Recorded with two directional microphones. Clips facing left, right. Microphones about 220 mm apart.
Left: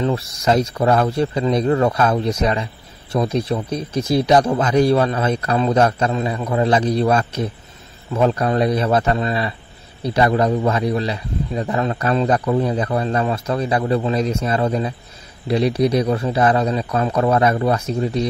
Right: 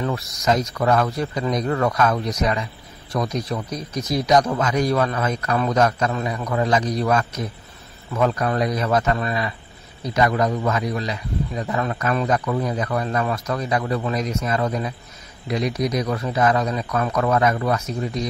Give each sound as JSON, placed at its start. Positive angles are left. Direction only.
{"t": 0.0, "sound": "a man's voice", "side_deg": 30}